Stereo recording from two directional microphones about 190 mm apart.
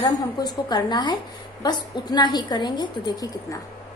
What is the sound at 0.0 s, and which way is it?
A woman's voice, 20° left (ahead or behind).